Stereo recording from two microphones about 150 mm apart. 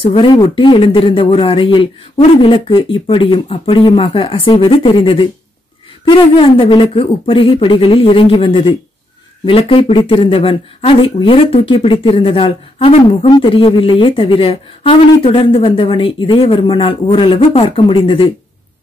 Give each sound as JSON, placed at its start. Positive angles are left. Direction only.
{"t": 0.0, "sound": "speech", "side_deg": 40}